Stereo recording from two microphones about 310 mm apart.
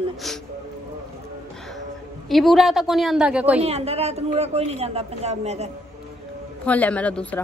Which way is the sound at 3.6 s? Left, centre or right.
Centre.